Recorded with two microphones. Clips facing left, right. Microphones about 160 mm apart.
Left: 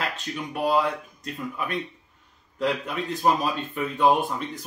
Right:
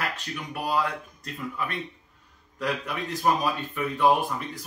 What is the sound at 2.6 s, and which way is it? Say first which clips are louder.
Speech: left 3 dB; 20° left (ahead or behind).